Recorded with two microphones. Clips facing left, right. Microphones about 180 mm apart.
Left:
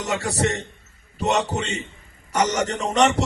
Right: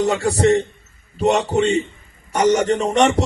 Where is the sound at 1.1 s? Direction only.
30° right (ahead or behind).